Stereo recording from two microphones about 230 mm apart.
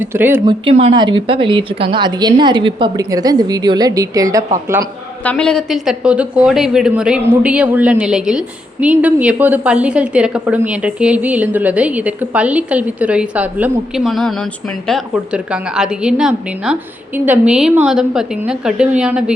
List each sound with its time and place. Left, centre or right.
0.0 s speech: centre
0.6 s a woman's voice: right
5.2 s a woman's voice: centre